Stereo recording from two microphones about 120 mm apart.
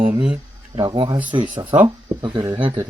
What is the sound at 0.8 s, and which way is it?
Speech, 40° right (ahead or behind).